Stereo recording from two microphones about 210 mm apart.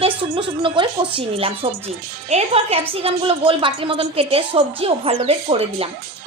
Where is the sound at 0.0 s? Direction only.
25° right (ahead or behind).